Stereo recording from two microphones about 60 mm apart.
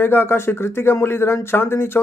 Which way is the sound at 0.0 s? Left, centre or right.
Left.